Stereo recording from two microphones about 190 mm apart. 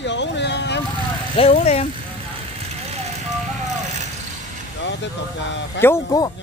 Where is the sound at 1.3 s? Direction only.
30° left (ahead or behind).